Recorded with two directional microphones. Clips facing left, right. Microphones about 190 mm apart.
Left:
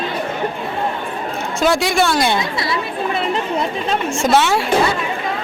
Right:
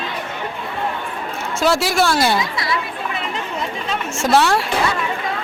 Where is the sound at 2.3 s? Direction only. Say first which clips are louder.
Left 1 dB; 25° left (ahead or behind).